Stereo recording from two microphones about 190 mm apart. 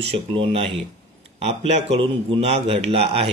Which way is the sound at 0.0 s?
30° right (ahead or behind).